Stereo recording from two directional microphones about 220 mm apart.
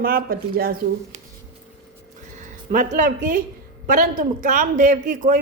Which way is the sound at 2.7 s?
35° right (ahead or behind).